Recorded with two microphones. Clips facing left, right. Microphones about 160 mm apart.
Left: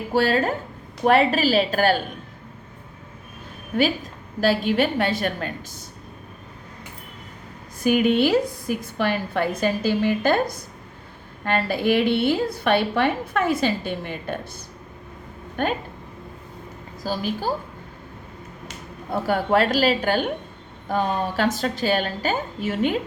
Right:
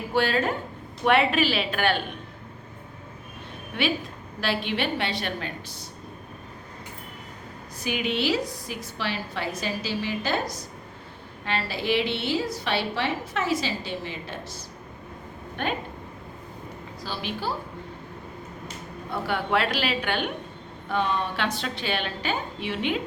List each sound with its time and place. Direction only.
0.1 s a woman's voice: 40° left (ahead or behind)
4.4 s a woman's voice: 40° left (ahead or behind)
7.8 s a woman's voice: 50° left (ahead or behind)
15.6 s a woman's voice: 45° left (ahead or behind)
17.0 s a woman's voice: 40° left (ahead or behind)
19.1 s a woman's voice: 40° left (ahead or behind)